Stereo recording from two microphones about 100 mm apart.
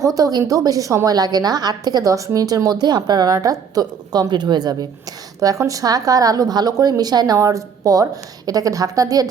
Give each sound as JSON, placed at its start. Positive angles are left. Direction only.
{"t": 0.0, "sound": "a woman's voice", "side_deg": -35}